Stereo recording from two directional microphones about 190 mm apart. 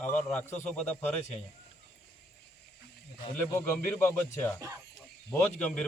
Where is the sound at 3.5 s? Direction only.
10° left (ahead or behind).